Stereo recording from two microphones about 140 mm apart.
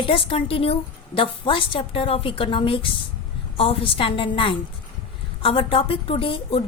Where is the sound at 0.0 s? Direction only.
40° left (ahead or behind).